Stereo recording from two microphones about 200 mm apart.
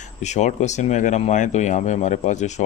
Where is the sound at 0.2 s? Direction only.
35° left (ahead or behind).